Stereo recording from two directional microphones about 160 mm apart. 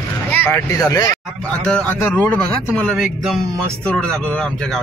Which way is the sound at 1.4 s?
5° left (ahead or behind).